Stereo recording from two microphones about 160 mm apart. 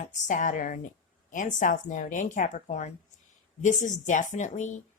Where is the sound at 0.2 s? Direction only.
50° left (ahead or behind).